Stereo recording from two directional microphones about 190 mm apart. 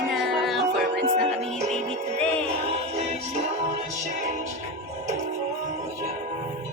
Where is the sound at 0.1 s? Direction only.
Centre (ahead or behind).